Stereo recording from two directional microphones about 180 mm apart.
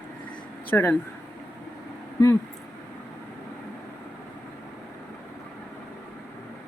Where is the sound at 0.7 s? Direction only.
10° left (ahead or behind).